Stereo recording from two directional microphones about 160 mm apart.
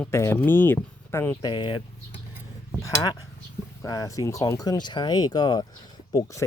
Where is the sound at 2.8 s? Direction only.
25° left (ahead or behind).